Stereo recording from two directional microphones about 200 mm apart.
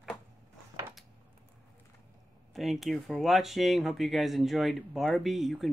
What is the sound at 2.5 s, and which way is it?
Speech, centre (ahead or behind).